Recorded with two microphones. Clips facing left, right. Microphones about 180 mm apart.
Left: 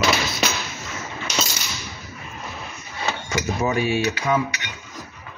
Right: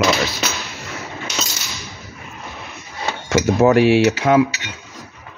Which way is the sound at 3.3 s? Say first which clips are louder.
Right 11 dB; 75° right (ahead or behind).